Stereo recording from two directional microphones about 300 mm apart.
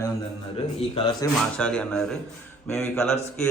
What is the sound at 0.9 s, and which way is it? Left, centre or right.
Speech, centre.